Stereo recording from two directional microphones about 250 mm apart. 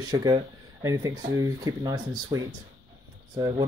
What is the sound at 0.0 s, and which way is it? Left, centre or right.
Speech, centre.